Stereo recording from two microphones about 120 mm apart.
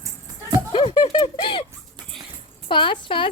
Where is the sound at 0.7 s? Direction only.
50° left (ahead or behind).